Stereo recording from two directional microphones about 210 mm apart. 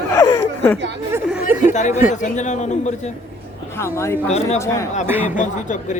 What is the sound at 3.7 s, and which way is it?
Speech, 10° left (ahead or behind).